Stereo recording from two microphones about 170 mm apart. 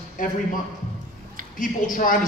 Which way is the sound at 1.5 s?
50° left (ahead or behind).